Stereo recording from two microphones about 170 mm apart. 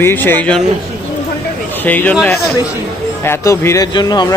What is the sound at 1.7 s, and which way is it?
Speech, 10° left (ahead or behind).